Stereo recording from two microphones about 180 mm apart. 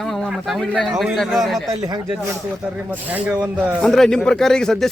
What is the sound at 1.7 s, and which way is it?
Speech, 20° right (ahead or behind).